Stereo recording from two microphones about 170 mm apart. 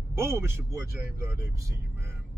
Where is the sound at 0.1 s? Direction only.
15° right (ahead or behind).